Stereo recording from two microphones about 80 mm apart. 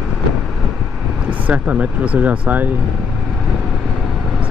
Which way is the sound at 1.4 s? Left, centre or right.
Centre.